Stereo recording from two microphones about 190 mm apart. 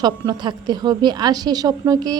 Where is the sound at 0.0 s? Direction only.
20° right (ahead or behind).